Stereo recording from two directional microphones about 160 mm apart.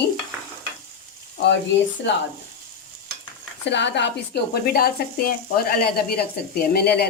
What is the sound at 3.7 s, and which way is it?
A woman's voice, 90° left.